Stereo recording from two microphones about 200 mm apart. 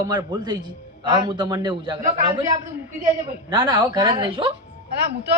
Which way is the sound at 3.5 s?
20° right (ahead or behind).